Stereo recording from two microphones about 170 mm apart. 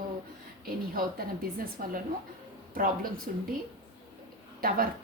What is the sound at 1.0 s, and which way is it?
A woman's voice, 55° right (ahead or behind).